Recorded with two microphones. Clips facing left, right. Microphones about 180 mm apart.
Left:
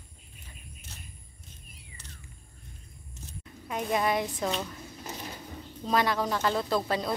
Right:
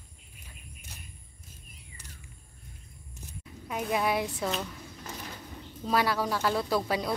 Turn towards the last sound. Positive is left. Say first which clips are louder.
# even
turn(degrees=-10)  # may be behind; listen again after turning